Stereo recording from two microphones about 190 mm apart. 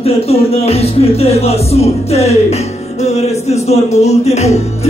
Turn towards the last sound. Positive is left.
turn(degrees=35)  # may be behind; listen again after turning